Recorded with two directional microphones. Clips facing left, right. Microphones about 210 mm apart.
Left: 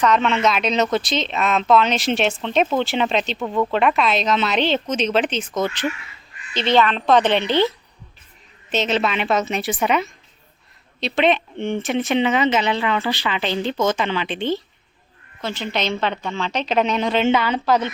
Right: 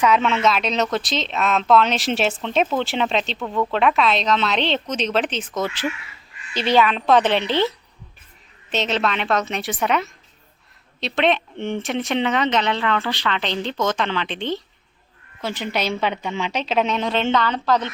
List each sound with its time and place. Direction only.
0.0 s speech: 5° right (ahead or behind)
8.7 s speech: centre (ahead or behind)
15.4 s speech: 10° right (ahead or behind); by 17.9 s 5° left (ahead or behind)